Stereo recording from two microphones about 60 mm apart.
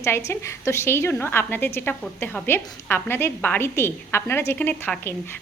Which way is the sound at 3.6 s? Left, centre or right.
Left.